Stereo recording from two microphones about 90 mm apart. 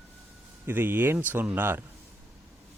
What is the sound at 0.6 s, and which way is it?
Speech, 25° right (ahead or behind).